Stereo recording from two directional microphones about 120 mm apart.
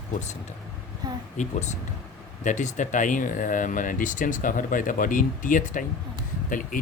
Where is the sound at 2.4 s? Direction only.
90° left.